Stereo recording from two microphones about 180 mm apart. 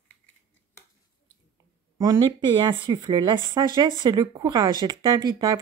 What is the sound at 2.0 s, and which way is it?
Speech, 20° right (ahead or behind).